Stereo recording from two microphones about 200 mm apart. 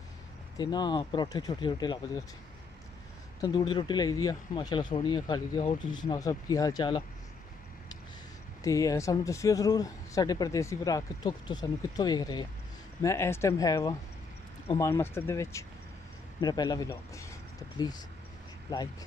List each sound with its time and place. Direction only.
0.6 s speech: 20° left (ahead or behind)
3.3 s speech: 20° left (ahead or behind)
8.6 s speech: 15° left (ahead or behind)